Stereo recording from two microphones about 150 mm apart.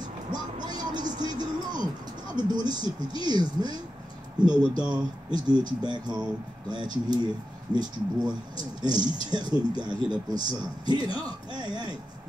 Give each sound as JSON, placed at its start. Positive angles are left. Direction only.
{"t": 0.3, "sound": "vehicle", "side_deg": -30}
{"t": 2.3, "sound": "speech", "side_deg": -30}